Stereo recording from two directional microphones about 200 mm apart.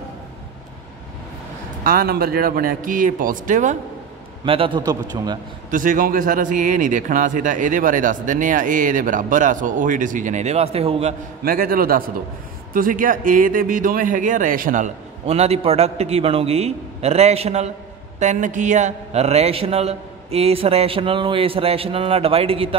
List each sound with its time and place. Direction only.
1.9 s speech: 50° right (ahead or behind)
4.5 s a man's voice: 25° right (ahead or behind)
5.7 s speech: 40° right (ahead or behind)
11.4 s a man's voice: 50° right (ahead or behind); by 22.8 s 30° right (ahead or behind)